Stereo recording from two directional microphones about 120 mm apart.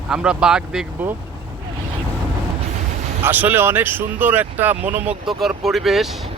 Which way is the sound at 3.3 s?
15° right (ahead or behind).